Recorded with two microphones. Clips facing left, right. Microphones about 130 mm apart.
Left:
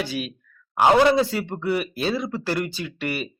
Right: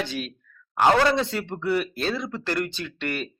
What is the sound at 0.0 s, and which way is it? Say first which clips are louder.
Speech: left 2 dB; 5° left (ahead or behind).